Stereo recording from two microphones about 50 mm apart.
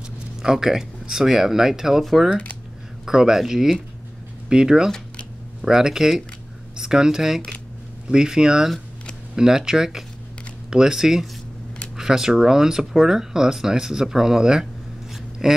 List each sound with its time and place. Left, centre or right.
0.4 s speech: centre